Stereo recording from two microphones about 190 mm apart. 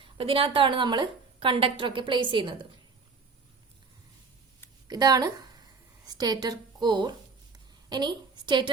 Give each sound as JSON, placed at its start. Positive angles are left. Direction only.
{"t": 0.0, "sound": "a woman's voice", "side_deg": -30}
{"t": 4.9, "sound": "a woman's voice", "side_deg": -20}
{"t": 6.1, "sound": "a sound", "side_deg": -20}